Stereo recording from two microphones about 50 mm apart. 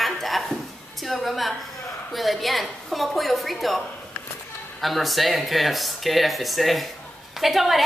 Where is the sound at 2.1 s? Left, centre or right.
Centre.